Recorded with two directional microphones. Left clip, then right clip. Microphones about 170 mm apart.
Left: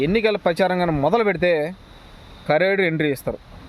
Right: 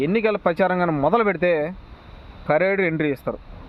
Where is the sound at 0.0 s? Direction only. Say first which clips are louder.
Left 1 dB; 15° left (ahead or behind).